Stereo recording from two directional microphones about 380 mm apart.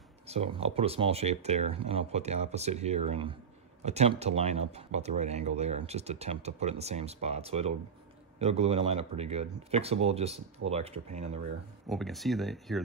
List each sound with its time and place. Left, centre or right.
0.3 s speech: centre
11.9 s speech: centre